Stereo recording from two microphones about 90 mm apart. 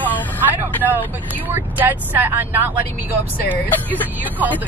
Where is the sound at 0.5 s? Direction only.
20° right (ahead or behind).